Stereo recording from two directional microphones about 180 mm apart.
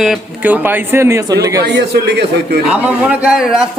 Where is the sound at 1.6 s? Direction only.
65° right (ahead or behind).